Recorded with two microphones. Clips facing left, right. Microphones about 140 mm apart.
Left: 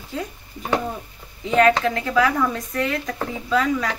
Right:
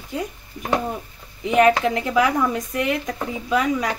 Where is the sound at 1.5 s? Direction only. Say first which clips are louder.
Right 1 dB; 15° right (ahead or behind).